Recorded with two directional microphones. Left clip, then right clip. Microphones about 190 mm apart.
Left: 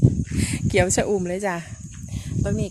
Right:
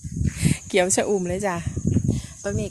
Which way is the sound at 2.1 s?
5° right (ahead or behind).